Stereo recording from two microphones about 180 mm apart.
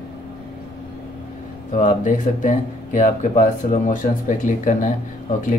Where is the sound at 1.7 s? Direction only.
45° left (ahead or behind).